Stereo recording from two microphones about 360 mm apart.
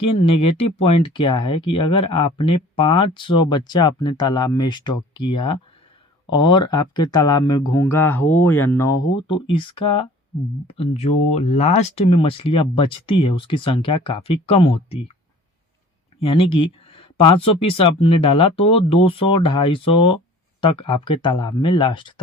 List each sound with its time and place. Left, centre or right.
0.0 s speech: centre
16.2 s speech: centre